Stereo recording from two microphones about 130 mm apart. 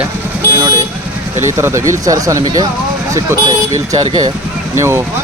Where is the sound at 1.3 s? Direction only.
20° right (ahead or behind).